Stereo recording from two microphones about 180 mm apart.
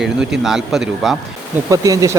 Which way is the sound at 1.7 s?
20° right (ahead or behind).